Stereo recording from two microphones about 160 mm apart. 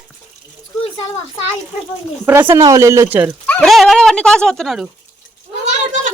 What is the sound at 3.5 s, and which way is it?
Speech, 5° left (ahead or behind).